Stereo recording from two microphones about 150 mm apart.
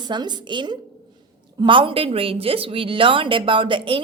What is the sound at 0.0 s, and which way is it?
A woman's voice, 30° right (ahead or behind).